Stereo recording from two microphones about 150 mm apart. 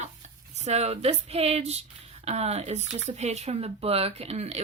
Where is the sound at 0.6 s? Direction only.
45° right (ahead or behind).